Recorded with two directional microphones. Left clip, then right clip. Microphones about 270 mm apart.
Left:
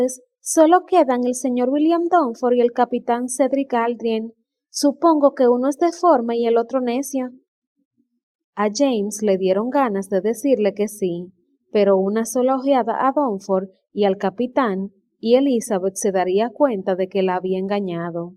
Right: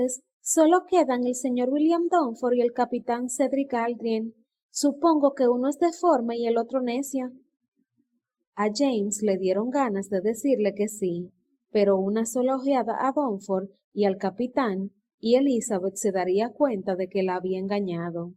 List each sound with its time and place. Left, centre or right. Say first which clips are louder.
0.0 s a woman's voice: left 6 dB; left
8.5 s a woman's voice: left 6 dB; left